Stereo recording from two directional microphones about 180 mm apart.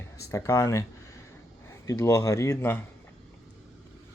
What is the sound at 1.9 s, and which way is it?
Speech, 20° left (ahead or behind).